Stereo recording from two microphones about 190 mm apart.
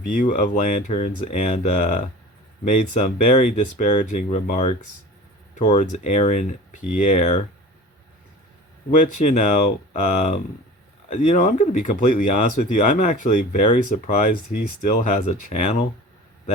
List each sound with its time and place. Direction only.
0.0 s speech: 45° left (ahead or behind)
8.9 s speech: 40° left (ahead or behind)